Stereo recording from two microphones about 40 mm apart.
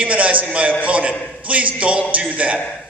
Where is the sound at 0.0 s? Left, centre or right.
Right.